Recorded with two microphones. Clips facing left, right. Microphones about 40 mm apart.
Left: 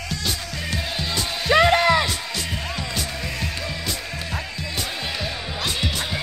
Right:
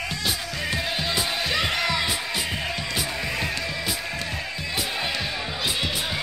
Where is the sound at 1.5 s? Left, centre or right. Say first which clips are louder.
Left 11 dB; left.